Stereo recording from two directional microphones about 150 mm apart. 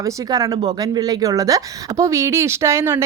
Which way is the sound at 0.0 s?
25° right (ahead or behind).